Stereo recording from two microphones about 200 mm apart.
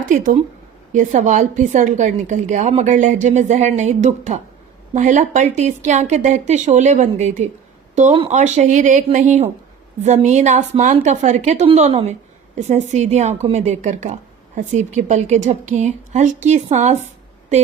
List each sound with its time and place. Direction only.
0.1 s a woman's voice: 40° right (ahead or behind)